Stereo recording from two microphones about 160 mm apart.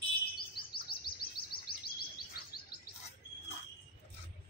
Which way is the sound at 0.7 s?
70° left (ahead or behind).